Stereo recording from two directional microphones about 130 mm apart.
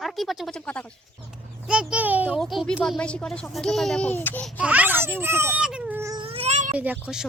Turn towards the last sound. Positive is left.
turn(degrees=-10)  # may be behind; listen again after turning